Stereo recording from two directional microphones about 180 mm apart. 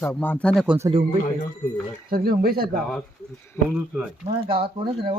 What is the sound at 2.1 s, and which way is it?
Speech, 55° right (ahead or behind).